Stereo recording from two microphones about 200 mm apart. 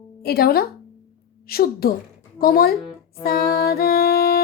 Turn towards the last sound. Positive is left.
turn(degrees=50)  # may be behind; listen again after turning